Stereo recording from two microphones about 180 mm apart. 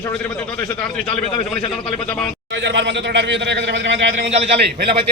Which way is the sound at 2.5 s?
80° right.